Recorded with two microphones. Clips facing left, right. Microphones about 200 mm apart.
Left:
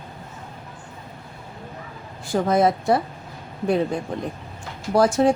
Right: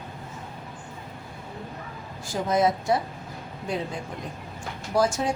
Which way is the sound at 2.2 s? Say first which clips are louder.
Left 4 dB; 60° left (ahead or behind).